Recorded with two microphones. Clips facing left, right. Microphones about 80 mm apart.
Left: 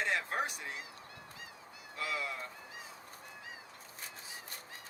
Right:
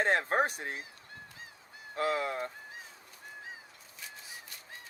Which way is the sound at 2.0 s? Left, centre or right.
Right.